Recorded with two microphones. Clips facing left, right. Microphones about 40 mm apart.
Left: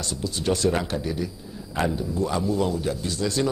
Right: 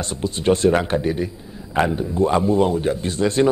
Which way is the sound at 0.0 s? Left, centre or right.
Right.